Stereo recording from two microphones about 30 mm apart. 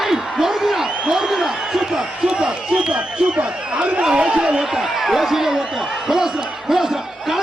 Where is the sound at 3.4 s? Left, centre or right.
Right.